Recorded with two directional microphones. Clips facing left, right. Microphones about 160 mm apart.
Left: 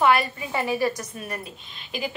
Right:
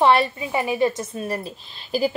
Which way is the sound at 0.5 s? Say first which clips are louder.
Right 3 dB; 20° right (ahead or behind).